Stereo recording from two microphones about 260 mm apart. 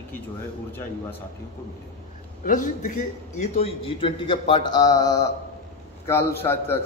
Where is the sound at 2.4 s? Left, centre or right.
Left; by 6.8 s centre.